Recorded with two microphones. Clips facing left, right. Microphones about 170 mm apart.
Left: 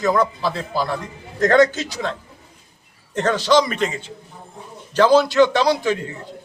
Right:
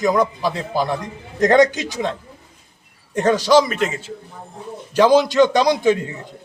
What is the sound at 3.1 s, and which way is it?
A man's voice, 10° right (ahead or behind).